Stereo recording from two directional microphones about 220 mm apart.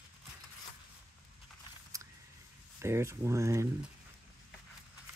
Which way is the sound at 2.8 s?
10° right (ahead or behind).